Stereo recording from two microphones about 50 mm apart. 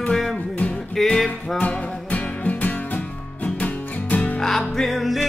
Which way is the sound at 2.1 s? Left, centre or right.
Left.